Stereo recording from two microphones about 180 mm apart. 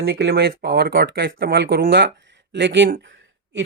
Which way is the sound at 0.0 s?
65° right (ahead or behind).